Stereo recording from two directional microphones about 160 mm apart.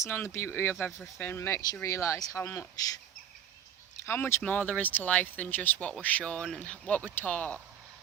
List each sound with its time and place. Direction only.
0.0 s speech: 15° left (ahead or behind)
4.0 s speech: 15° left (ahead or behind)